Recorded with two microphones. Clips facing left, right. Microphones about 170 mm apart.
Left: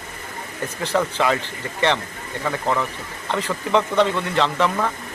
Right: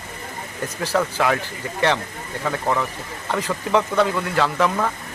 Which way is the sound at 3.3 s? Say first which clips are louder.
Even; 10° right (ahead or behind).